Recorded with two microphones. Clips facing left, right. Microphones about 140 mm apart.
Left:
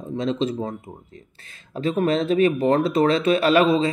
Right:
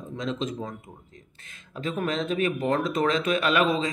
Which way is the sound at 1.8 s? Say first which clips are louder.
Left 7 dB; 30° left (ahead or behind).